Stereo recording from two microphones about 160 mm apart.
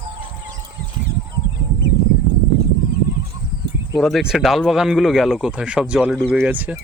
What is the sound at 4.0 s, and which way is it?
Speech, centre (ahead or behind).